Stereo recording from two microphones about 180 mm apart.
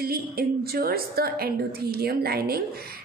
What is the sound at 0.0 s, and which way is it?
A woman's voice, 55° right (ahead or behind).